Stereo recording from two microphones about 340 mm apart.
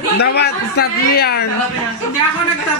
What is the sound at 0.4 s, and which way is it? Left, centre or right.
A man's voice, left.